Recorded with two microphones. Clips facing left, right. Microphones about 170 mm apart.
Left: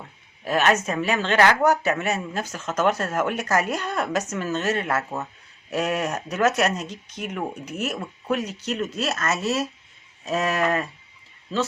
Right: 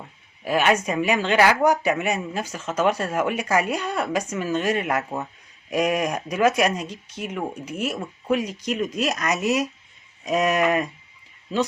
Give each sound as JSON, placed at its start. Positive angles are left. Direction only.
{"t": 0.4, "sound": "speech", "side_deg": -10}